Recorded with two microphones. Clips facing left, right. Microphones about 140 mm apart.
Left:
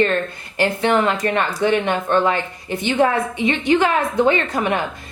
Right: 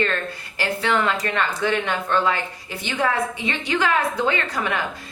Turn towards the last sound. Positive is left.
turn(degrees=20)  # may be behind; listen again after turning